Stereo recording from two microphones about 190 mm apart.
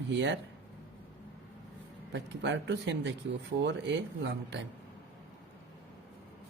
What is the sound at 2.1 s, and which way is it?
Speech, 70° right (ahead or behind).